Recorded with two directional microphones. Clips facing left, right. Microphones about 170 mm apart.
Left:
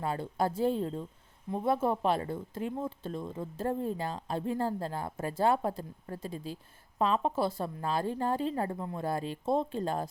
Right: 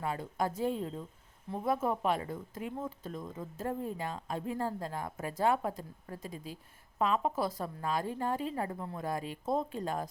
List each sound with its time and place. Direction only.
0.0 s a woman's voice: 30° left (ahead or behind)
8.8 s speech: 20° left (ahead or behind)
9.0 s speech: 30° left (ahead or behind)